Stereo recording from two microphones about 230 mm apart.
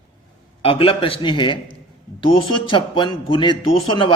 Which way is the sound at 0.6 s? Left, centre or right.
Left.